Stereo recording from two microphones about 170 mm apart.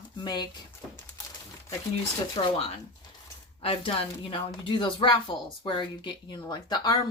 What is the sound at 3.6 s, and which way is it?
Speech, 35° left (ahead or behind).